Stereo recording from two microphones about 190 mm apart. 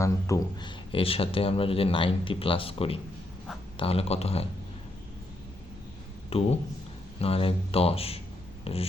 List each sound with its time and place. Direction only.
0.0 s speech: 15° left (ahead or behind)
0.9 s speech: 30° left (ahead or behind)
6.3 s speech: 30° left (ahead or behind)
8.6 s a sound: 30° left (ahead or behind)